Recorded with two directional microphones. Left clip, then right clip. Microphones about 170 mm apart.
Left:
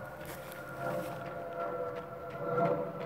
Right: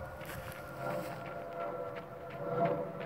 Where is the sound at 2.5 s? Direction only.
30° right (ahead or behind).